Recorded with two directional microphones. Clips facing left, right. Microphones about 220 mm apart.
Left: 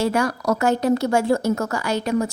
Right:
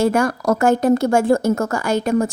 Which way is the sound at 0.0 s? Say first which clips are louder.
Right 4 dB; 50° right (ahead or behind).